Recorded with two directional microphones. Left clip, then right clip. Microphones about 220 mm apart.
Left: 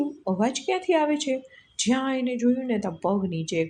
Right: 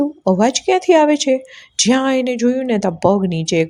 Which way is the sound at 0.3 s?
40° right (ahead or behind).